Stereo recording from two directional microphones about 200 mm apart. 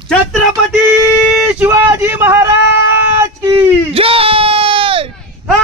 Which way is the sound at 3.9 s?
30° right (ahead or behind).